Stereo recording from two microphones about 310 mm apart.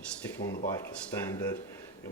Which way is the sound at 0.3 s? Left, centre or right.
Left.